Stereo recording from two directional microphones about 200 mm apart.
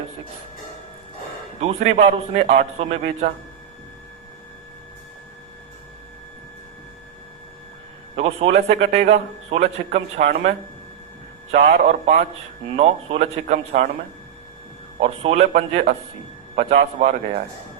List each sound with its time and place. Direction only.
1.6 s a man's voice: 30° right (ahead or behind)
8.1 s a man's voice: 30° right (ahead or behind)
11.5 s a man's voice: 35° right (ahead or behind)
15.0 s a man's voice: 35° right (ahead or behind)